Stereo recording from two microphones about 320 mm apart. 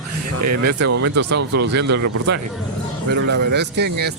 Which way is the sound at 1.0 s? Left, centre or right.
Right.